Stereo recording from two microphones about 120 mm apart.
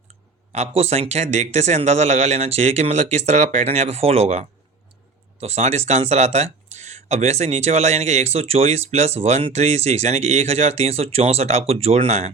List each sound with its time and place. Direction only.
0.5 s speech: 60° right (ahead or behind)